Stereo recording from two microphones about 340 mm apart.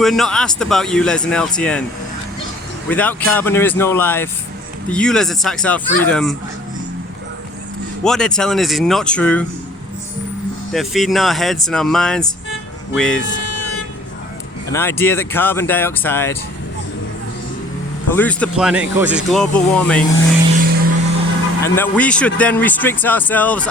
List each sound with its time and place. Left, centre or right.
0.0 s a man's voice: centre
2.9 s a man's voice: centre
8.0 s a man's voice: centre
10.7 s a man's voice: centre
13.4 s vehicle: left
14.7 s speech: centre
18.1 s a man's voice: centre
20.6 s music: right
21.6 s a man's voice: centre